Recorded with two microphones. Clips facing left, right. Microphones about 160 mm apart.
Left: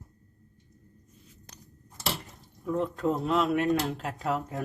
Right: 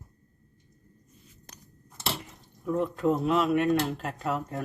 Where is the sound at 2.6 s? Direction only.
Centre (ahead or behind).